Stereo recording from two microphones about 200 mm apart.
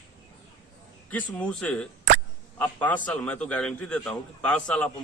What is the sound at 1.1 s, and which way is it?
A man's voice, 5° left (ahead or behind).